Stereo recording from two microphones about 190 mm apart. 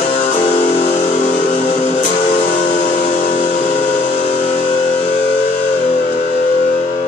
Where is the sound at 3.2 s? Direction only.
35° left (ahead or behind).